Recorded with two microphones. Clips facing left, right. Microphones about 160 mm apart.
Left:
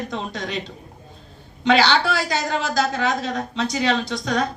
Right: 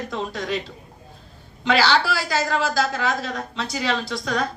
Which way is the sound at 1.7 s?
20° left (ahead or behind).